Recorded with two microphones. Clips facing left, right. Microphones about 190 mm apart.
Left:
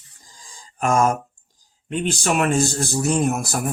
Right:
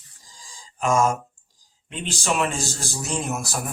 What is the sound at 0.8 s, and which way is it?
Speech, 55° left (ahead or behind).